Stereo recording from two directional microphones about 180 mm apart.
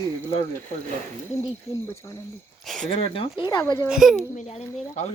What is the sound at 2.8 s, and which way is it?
Speech, 30° left (ahead or behind).